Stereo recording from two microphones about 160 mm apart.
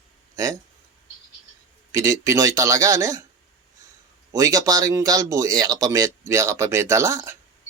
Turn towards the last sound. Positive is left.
turn(degrees=-20)  # may be behind; listen again after turning